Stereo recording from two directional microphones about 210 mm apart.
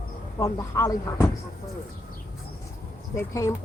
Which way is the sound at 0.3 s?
15° left (ahead or behind).